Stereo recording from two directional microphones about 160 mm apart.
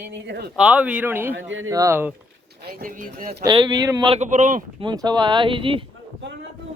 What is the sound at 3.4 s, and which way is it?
Speech, 30° right (ahead or behind).